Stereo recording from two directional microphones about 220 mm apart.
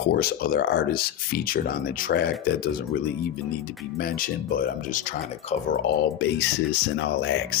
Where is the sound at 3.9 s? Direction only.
40° left (ahead or behind).